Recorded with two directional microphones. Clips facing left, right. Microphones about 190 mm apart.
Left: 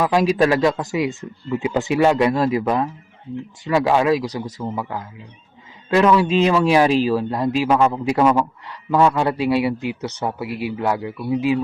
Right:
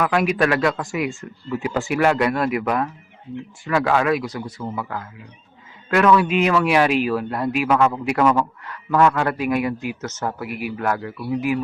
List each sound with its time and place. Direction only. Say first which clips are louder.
0.0 s speech: left 3 dB; 30° left (ahead or behind)
4.4 s speech: left 2 dB; 40° left (ahead or behind)
4.7 s speech: left 2 dB; 15° left (ahead or behind)
7.3 s speech: left 2 dB; 15° left (ahead or behind)
7.5 s speech: left 1 dB; 25° left (ahead or behind)
10.4 s speech: left 3 dB; 25° left (ahead or behind)